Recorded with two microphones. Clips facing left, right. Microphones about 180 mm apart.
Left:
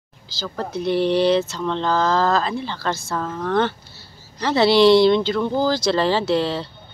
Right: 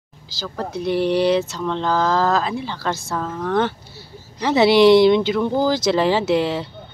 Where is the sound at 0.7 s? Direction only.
10° right (ahead or behind).